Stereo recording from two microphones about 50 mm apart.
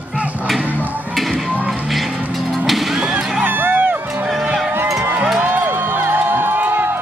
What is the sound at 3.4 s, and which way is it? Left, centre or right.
Music, right.